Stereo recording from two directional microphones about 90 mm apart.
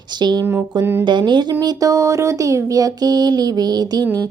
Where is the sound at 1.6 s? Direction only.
45° right (ahead or behind).